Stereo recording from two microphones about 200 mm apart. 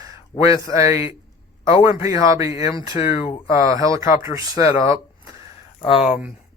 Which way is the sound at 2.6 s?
25° left (ahead or behind).